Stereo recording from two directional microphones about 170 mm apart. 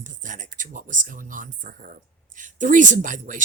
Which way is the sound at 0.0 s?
50° right (ahead or behind).